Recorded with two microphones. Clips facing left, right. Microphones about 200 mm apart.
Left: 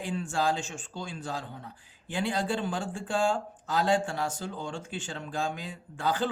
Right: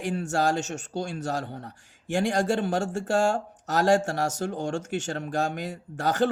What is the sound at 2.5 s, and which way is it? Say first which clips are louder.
Speech: right 6 dB; 70° right (ahead or behind).